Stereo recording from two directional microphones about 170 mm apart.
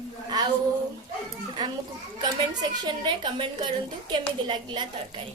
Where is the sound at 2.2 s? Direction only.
25° right (ahead or behind).